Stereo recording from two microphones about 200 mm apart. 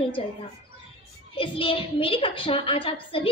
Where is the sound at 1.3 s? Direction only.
25° left (ahead or behind).